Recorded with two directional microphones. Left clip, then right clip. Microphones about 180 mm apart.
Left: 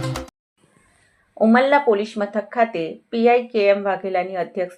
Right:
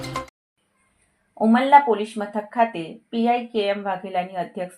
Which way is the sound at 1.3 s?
15° left (ahead or behind).